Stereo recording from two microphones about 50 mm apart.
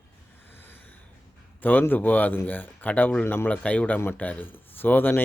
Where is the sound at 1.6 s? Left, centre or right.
Left.